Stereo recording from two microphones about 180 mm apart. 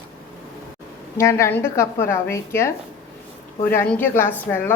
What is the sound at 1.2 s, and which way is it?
A woman's voice, 15° left (ahead or behind).